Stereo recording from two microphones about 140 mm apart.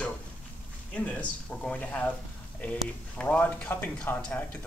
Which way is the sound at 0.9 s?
5° left (ahead or behind).